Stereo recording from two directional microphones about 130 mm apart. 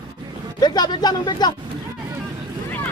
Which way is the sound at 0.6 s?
35° left (ahead or behind).